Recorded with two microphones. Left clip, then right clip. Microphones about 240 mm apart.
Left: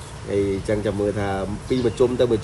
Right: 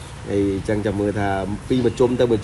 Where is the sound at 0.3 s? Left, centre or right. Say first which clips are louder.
Right 1 dB; right.